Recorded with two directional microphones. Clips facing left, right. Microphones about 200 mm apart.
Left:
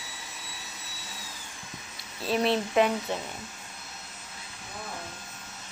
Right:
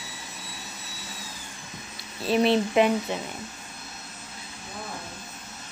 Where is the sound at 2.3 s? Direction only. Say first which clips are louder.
Right 4 dB; 25° right (ahead or behind).